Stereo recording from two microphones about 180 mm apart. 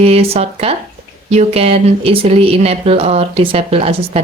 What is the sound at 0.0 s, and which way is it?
Speech, 35° right (ahead or behind).